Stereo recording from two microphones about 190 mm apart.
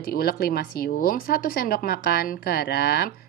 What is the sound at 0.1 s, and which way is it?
A woman's voice, 55° left (ahead or behind).